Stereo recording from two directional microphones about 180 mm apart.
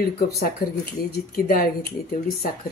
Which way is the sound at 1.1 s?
55° left (ahead or behind).